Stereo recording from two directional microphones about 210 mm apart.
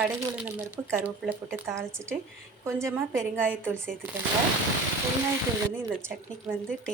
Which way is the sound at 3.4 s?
5° left (ahead or behind).